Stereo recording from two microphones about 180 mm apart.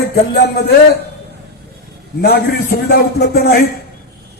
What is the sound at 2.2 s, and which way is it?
A man's voice, 60° left (ahead or behind).